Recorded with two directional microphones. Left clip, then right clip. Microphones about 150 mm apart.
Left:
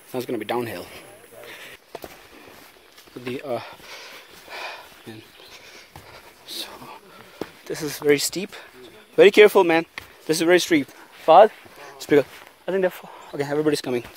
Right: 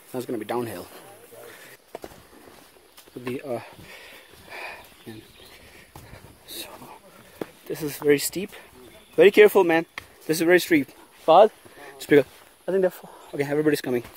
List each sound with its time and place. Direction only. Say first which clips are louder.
0.1 s speech: left 3 dB; 5° right (ahead or behind)
0.7 s speech: left 3 dB; 10° right (ahead or behind)
3.3 s a sound: left 5 dB; 20° right (ahead or behind)
6.4 s a sound: left 5 dB; 30° right (ahead or behind)
7.6 s speech: left 1 dB; 20° right (ahead or behind); by 12.3 s 45° right (ahead or behind)
12.6 s speech: even; 10° right (ahead or behind)
13.4 s speech: even; 55° right (ahead or behind); by 14.0 s 35° right (ahead or behind)